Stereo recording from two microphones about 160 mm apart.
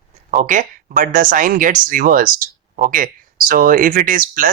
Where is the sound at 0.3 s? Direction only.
50° right (ahead or behind).